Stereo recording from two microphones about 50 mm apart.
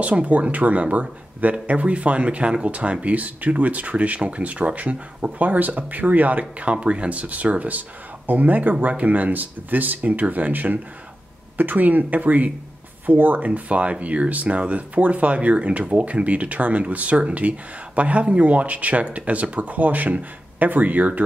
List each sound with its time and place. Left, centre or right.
0.0 s speech: right
13.5 s speech: right